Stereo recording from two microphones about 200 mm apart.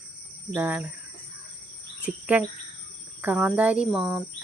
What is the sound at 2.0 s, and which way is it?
Speech, 5° right (ahead or behind).